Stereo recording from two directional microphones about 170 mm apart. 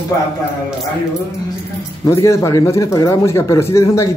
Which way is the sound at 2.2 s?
15° left (ahead or behind).